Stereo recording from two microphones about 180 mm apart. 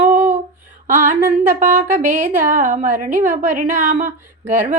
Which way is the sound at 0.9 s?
45° right (ahead or behind).